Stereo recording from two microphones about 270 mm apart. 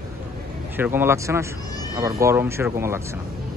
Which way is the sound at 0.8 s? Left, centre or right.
Centre.